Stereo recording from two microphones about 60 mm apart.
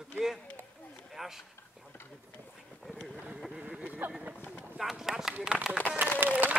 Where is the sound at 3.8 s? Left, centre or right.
Right.